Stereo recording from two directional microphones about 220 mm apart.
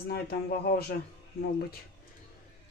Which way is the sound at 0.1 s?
45° left (ahead or behind).